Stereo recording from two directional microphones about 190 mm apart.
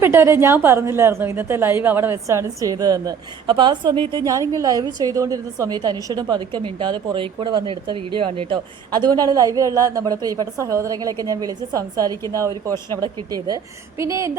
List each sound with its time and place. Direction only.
0.0 s a woman's voice: 15° right (ahead or behind)